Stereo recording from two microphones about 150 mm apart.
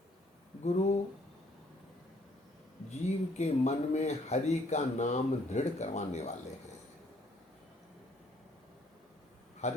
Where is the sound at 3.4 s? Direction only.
50° left (ahead or behind).